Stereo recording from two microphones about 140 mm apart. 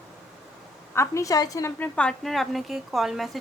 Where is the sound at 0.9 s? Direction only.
20° left (ahead or behind).